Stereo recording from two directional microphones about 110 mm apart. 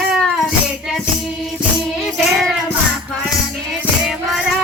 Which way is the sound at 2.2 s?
Centre (ahead or behind).